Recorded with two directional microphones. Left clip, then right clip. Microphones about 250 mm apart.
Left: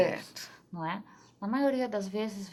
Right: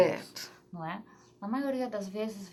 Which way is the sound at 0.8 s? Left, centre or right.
Left.